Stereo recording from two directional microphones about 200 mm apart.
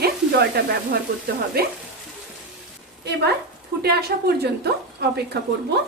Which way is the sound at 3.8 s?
50° right (ahead or behind).